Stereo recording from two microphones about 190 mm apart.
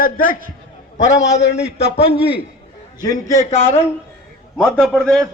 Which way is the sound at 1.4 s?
65° left (ahead or behind).